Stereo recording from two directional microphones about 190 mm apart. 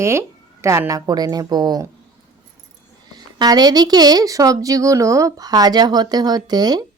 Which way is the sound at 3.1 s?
20° right (ahead or behind).